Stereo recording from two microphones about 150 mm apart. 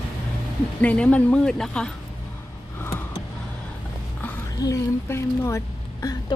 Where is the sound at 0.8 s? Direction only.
10° left (ahead or behind).